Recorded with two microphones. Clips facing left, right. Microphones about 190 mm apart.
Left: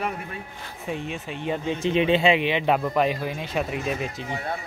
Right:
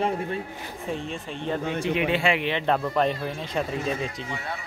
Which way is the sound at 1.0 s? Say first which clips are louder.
Left 1 dB; 5° left (ahead or behind).